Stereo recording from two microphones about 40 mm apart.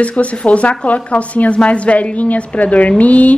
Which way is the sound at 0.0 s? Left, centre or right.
Left.